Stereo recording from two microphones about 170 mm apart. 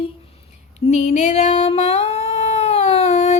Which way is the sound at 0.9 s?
45° left (ahead or behind).